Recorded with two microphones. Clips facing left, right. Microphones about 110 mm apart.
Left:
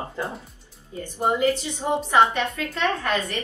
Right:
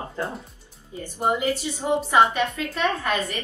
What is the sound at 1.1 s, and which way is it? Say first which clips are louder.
A woman's voice: left 2 dB; 15° right (ahead or behind).